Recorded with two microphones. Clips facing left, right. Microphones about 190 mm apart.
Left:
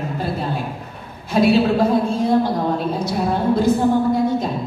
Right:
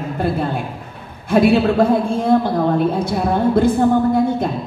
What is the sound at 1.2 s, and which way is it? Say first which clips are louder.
A woman's voice: right 2 dB; 55° right (ahead or behind).